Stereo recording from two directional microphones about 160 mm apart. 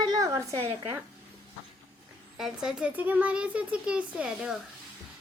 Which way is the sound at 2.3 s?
5° right (ahead or behind).